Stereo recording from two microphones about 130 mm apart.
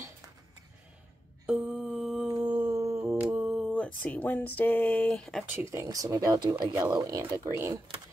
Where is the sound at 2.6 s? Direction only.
25° right (ahead or behind).